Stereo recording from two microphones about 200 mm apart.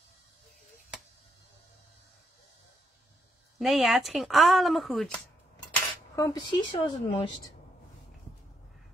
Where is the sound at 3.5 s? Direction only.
Centre (ahead or behind).